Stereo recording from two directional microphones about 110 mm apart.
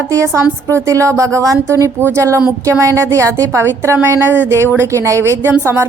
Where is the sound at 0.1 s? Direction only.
25° right (ahead or behind).